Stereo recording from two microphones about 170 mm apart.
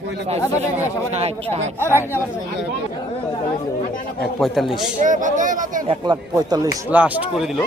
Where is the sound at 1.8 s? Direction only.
15° left (ahead or behind).